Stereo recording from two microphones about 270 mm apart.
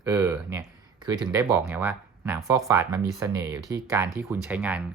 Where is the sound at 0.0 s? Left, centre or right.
Centre.